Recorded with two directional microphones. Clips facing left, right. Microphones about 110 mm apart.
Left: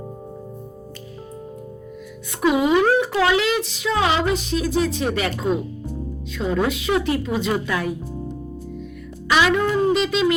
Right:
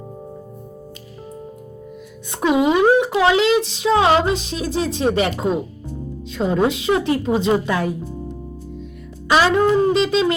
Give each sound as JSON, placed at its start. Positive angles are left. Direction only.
{"t": 2.4, "sound": "music", "side_deg": -25}
{"t": 4.2, "sound": "speech", "side_deg": -25}
{"t": 9.3, "sound": "speech", "side_deg": -35}